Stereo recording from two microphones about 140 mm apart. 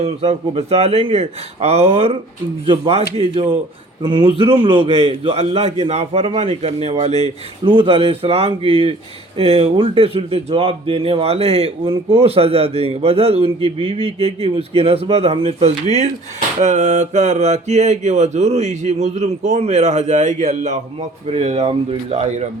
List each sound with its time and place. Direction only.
0.0 s mantra: 45° right (ahead or behind)
2.6 s a man's voice: 40° right (ahead or behind)
4.9 s mantra: 45° right (ahead or behind)